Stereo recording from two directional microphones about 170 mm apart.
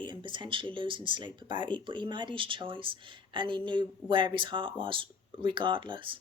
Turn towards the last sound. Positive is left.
turn(degrees=-30)  # may be behind; listen again after turning